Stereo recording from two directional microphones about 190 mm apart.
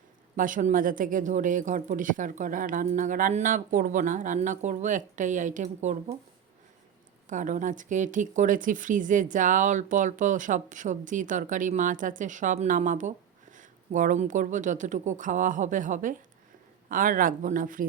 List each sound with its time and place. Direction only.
0.3 s speech: 45° right (ahead or behind)
7.3 s speech: 40° right (ahead or behind)